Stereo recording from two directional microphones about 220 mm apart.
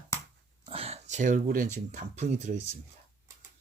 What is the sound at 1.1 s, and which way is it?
Speech, 35° right (ahead or behind).